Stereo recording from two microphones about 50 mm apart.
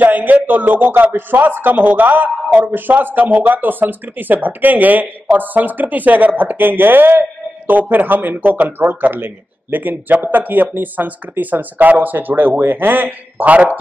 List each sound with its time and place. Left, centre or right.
0.0 s a man's voice: right